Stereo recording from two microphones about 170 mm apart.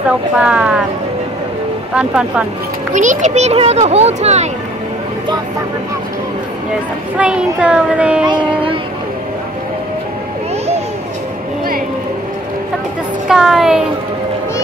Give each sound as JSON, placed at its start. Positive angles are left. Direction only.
{"t": 0.4, "sound": "a child's voice", "side_deg": -5}
{"t": 2.0, "sound": "speech", "side_deg": -5}
{"t": 2.9, "sound": "speech", "side_deg": -45}
{"t": 7.2, "sound": "a child's voice", "side_deg": -5}
{"t": 13.3, "sound": "speech", "side_deg": 0}